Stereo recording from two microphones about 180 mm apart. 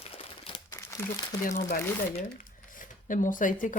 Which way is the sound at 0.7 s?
15° left (ahead or behind).